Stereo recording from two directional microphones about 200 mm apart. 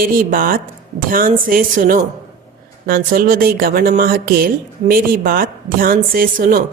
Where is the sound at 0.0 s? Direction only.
45° right (ahead or behind).